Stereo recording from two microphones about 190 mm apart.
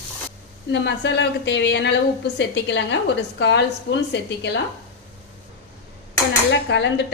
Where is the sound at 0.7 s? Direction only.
70° left (ahead or behind).